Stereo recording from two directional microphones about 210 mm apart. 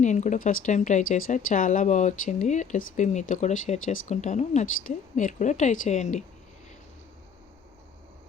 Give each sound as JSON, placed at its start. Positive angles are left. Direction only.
{"t": 0.0, "sound": "speech", "side_deg": 35}